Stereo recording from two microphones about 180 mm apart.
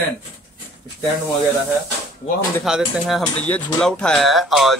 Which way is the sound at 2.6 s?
Centre (ahead or behind).